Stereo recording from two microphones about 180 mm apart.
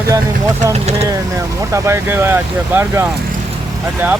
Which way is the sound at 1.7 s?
15° right (ahead or behind).